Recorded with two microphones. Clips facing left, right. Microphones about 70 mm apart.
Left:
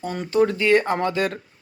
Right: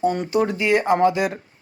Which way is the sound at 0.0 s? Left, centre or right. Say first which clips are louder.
Right 1 dB; centre.